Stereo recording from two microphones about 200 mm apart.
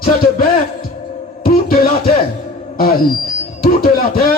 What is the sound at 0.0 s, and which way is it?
Speech, 45° left (ahead or behind).